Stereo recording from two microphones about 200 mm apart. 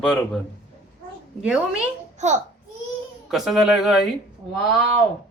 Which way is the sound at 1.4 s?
5° right (ahead or behind).